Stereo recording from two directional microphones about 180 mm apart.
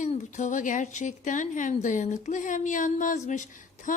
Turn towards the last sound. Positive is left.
turn(degrees=45)  # may be behind; listen again after turning